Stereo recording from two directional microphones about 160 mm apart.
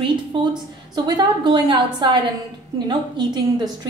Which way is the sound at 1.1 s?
30° right (ahead or behind).